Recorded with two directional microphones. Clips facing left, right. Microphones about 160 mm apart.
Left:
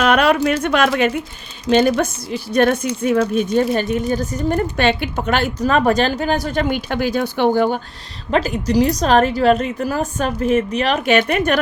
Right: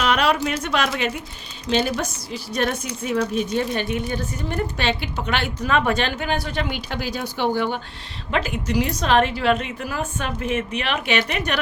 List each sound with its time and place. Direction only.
0.0 s a woman's voice: 55° left (ahead or behind)